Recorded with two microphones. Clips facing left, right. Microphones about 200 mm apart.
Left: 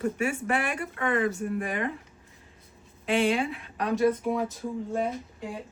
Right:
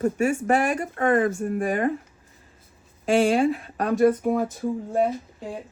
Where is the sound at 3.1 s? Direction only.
45° right (ahead or behind).